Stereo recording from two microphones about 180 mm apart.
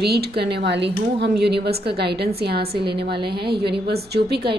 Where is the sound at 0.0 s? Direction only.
65° right (ahead or behind).